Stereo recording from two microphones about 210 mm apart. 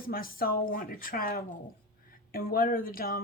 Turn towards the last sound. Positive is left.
turn(degrees=45)  # may be behind; listen again after turning